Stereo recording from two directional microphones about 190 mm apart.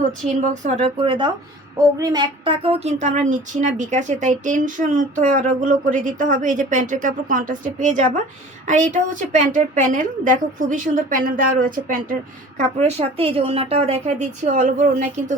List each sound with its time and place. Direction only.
0.6 s a woman's voice: 35° right (ahead or behind)
12.5 s speech: 35° right (ahead or behind)